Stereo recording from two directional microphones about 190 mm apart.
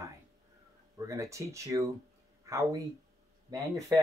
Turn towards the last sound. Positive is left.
turn(degrees=-15)  # may be behind; listen again after turning